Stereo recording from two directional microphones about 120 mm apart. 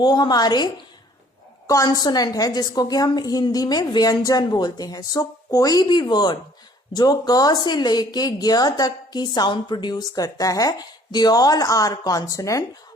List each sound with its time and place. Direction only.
0.0 s speech: 35° left (ahead or behind)